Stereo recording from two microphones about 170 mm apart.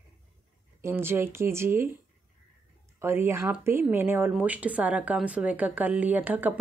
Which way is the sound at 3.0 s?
15° right (ahead or behind).